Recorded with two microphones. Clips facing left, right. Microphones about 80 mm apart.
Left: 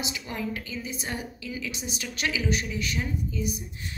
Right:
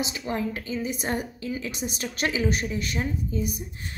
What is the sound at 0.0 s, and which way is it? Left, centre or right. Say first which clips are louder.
A woman's voice: right 4 dB; right.